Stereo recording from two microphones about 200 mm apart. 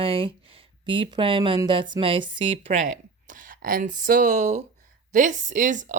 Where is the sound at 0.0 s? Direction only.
30° right (ahead or behind).